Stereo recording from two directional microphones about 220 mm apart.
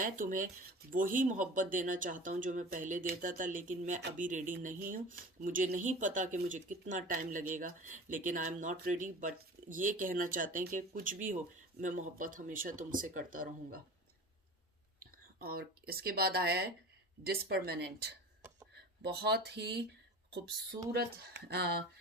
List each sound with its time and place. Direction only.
0.0 s speech: 35° right (ahead or behind)
15.4 s speech: 45° right (ahead or behind)
20.9 s speech: 45° right (ahead or behind)